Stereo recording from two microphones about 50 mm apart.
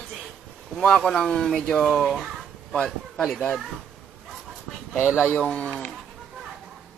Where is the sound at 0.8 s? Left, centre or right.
Centre.